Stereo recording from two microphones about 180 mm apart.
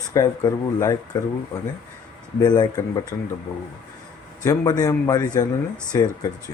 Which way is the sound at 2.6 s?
20° left (ahead or behind).